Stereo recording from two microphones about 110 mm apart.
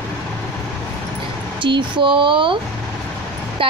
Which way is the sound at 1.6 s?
50° right (ahead or behind).